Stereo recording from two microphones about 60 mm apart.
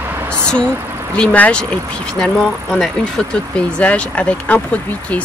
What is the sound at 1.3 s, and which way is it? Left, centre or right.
Speech, left.